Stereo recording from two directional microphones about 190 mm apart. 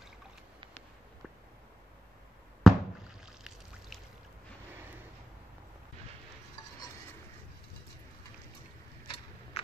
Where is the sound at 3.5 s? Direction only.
Centre (ahead or behind).